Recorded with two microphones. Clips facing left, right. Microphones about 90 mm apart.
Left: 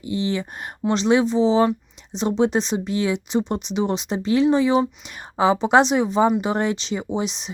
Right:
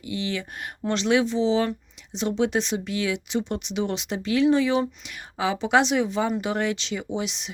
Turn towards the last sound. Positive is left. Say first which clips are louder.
# left 4 dB
turn(degrees=25)  # may be behind; listen again after turning